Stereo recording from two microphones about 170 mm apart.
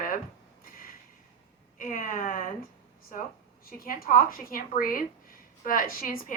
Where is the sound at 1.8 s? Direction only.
55° left (ahead or behind).